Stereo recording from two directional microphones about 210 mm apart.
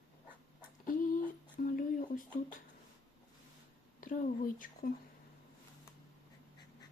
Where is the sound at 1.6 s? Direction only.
40° left (ahead or behind).